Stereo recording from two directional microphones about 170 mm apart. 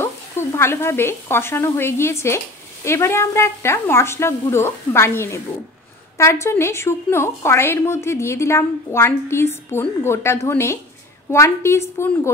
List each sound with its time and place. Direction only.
0.0 s speech: 15° left (ahead or behind)